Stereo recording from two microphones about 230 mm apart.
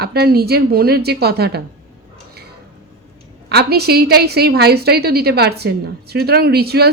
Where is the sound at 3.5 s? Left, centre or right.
Right.